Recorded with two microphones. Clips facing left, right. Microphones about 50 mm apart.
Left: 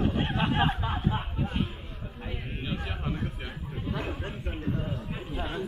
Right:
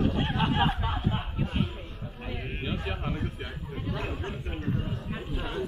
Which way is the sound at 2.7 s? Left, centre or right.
Centre.